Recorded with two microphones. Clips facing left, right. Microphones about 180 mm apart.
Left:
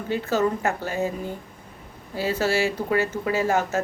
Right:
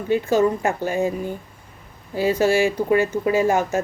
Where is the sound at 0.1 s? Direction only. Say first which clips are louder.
Right 5 dB; 15° right (ahead or behind).